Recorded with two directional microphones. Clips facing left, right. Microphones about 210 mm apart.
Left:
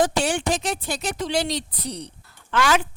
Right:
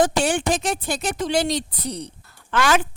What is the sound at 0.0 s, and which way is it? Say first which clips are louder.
Speech: right 2 dB; 50° right (ahead or behind).